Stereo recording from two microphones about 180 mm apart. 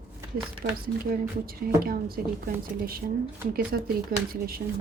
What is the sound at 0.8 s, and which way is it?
Speech, 55° right (ahead or behind).